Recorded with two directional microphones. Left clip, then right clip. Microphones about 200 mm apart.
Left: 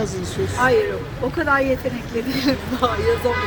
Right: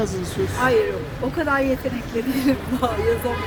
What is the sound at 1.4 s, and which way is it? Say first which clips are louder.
Speech: left 2 dB; 5° right (ahead or behind).